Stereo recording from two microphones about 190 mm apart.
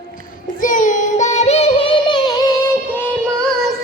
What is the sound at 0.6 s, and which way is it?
Singing, 45° left (ahead or behind).